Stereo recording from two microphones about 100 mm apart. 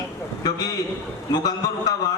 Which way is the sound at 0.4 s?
40° left (ahead or behind).